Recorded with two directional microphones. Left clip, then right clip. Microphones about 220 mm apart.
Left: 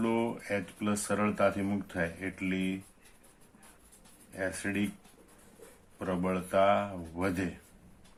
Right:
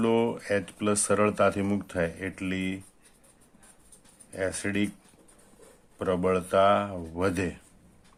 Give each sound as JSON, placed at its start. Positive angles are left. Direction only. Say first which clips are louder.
{"t": 0.0, "sound": "speech", "louder": "right 6 dB", "side_deg": -45}
{"t": 4.3, "sound": "speech", "louder": "right 4 dB", "side_deg": -45}
{"t": 6.0, "sound": "speech", "louder": "right 7 dB", "side_deg": -45}